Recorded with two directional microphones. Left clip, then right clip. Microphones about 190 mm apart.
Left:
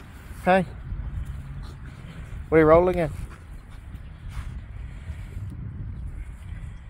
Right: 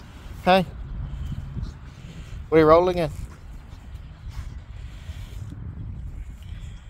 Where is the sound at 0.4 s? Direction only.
10° right (ahead or behind).